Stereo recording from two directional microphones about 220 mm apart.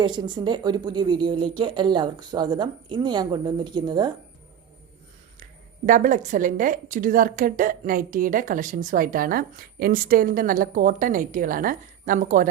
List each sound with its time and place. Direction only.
0.0 s speech: 20° right (ahead or behind)
5.4 s a woman's voice: 35° right (ahead or behind)